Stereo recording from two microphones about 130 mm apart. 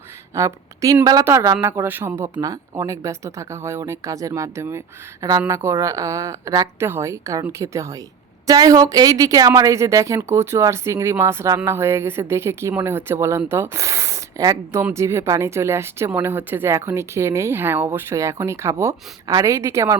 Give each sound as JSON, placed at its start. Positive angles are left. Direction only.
{"t": 0.3, "sound": "a woman's voice", "side_deg": -25}